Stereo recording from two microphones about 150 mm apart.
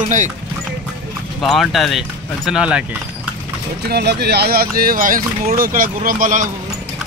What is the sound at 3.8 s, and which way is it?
Speech, 90° right.